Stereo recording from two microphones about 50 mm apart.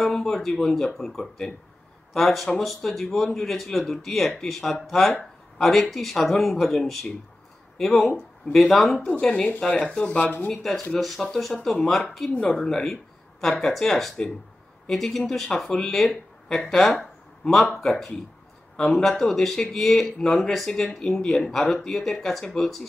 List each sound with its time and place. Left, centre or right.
0.0 s speech: centre
9.2 s speech: left
10.0 s speech: left
10.6 s speech: centre
17.0 s a sound: centre
17.7 s speech: centre